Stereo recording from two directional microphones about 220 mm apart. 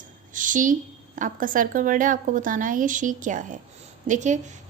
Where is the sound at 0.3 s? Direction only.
35° right (ahead or behind).